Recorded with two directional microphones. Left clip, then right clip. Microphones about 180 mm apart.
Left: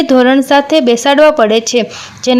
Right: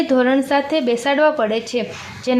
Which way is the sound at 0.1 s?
30° left (ahead or behind).